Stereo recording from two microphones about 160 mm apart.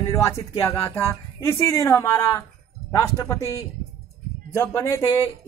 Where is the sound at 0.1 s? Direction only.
20° left (ahead or behind).